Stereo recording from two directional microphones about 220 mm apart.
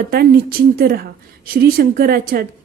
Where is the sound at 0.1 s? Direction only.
40° right (ahead or behind).